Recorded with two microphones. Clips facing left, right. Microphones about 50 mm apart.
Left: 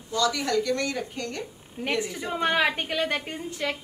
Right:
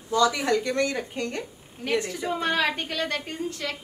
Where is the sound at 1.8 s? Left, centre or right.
Centre.